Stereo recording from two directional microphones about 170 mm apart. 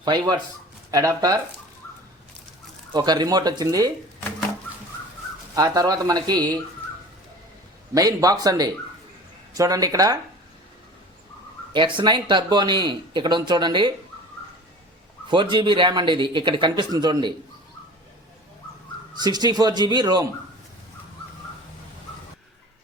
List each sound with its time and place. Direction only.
0.0 s speech: 25° right (ahead or behind)
2.9 s speech: 25° right (ahead or behind)
5.5 s speech: 20° right (ahead or behind)
7.9 s speech: 20° right (ahead or behind)
11.7 s speech: 30° right (ahead or behind)
15.3 s speech: 30° right (ahead or behind)
19.2 s speech: 25° right (ahead or behind)